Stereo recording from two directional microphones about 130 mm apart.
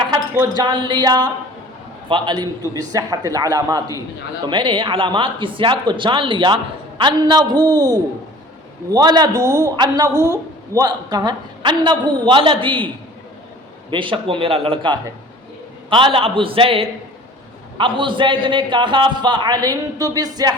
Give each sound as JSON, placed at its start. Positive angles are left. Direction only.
{"t": 0.5, "sound": "a man's voice", "side_deg": -35}
{"t": 4.4, "sound": "a man's voice", "side_deg": -40}
{"t": 13.9, "sound": "a man's voice", "side_deg": -40}